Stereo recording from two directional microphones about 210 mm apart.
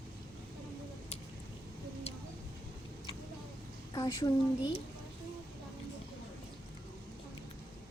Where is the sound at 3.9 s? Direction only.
15° left (ahead or behind).